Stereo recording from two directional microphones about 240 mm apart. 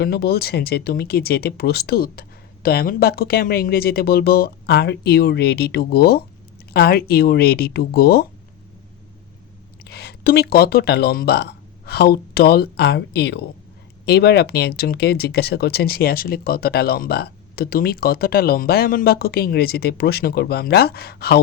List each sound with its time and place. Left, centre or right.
0.0 s speech: left
9.8 s speech: left